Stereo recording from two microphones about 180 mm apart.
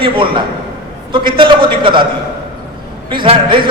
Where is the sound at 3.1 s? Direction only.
30° right (ahead or behind).